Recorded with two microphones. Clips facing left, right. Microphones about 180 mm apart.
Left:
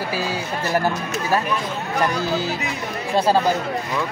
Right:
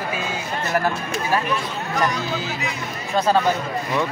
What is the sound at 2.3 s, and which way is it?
Speech, 35° left (ahead or behind).